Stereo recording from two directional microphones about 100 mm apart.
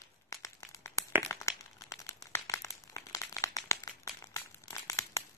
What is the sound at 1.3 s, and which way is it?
Crumpling, 30° left (ahead or behind).